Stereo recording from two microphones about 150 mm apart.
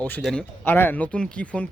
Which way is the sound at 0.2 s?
Centre (ahead or behind).